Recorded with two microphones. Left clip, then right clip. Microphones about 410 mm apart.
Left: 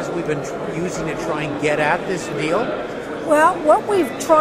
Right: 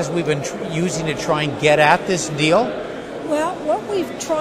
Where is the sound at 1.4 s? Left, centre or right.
Right.